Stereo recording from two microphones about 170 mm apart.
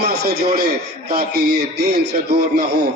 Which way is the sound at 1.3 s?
75° right (ahead or behind).